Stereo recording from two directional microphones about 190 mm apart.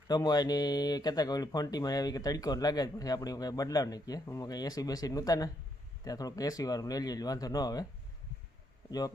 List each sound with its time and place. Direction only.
0.1 s speech: 20° left (ahead or behind)
8.9 s speech: 20° left (ahead or behind)